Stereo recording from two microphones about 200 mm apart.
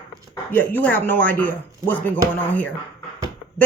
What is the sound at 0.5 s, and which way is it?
Speech, 10° left (ahead or behind).